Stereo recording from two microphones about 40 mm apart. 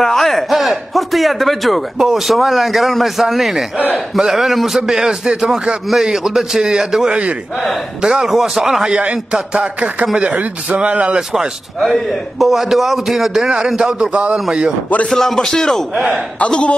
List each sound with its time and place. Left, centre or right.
0.0 s a man's voice: centre
8.3 s a man's voice: centre
9.3 s speech: right
10.3 s speech: right
11.1 s a man's voice: centre
11.8 s a man's voice: centre; by 14.4 s right
15.0 s a man's voice: centre
16.3 s a man's voice: left